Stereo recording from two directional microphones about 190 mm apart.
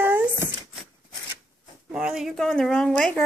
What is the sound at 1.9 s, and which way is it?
Speech, 5° right (ahead or behind).